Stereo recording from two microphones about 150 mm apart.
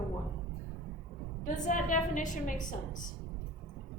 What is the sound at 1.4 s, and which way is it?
A woman's voice, 55° left (ahead or behind).